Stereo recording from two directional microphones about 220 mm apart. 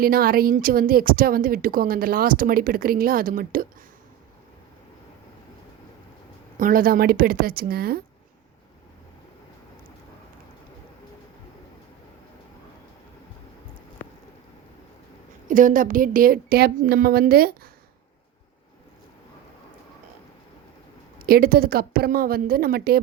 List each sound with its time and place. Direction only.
0.0 s a woman's voice: 45° right (ahead or behind)
6.6 s a woman's voice: 40° right (ahead or behind)
15.4 s a woman's voice: 35° right (ahead or behind)
21.2 s a woman's voice: 45° right (ahead or behind)